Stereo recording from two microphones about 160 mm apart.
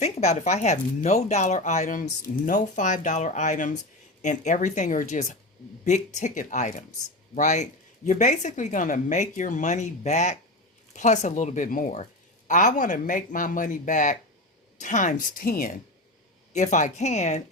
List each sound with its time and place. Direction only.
0.0 s speech: 45° left (ahead or behind); by 15.7 s 60° left (ahead or behind)
16.5 s speech: 50° left (ahead or behind)